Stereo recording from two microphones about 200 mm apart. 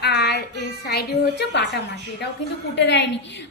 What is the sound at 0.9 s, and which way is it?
A woman's voice, 55° left (ahead or behind).